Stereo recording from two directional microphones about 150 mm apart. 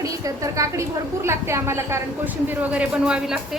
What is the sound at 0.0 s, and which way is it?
A woman's voice, 20° right (ahead or behind).